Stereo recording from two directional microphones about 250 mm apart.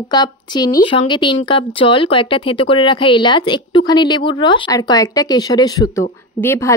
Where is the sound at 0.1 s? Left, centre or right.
Centre.